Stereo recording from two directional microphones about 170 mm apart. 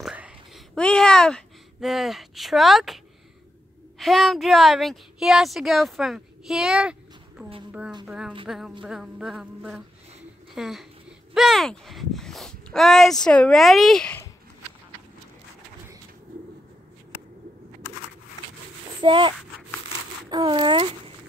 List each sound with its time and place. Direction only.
0.0 s whispering: 5° right (ahead or behind)
0.7 s speech: 5° left (ahead or behind)
4.0 s speech: centre (ahead or behind)
18.9 s speech: 30° right (ahead or behind)